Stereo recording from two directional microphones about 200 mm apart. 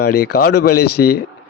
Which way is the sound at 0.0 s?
50° left (ahead or behind).